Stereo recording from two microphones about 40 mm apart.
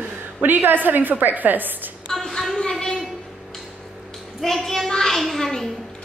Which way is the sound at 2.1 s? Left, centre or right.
Centre.